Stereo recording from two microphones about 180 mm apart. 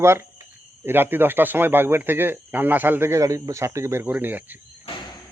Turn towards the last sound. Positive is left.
turn(degrees=-10)  # may be behind; listen again after turning